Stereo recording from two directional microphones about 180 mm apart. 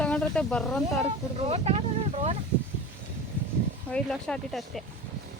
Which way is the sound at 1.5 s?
35° right (ahead or behind).